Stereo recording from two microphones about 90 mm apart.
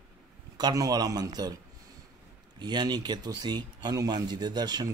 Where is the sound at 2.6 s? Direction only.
55° right (ahead or behind).